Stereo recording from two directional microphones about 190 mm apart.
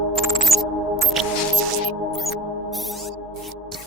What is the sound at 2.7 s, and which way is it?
Music, centre (ahead or behind).